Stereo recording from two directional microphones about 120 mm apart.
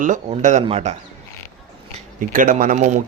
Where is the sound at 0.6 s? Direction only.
60° right (ahead or behind).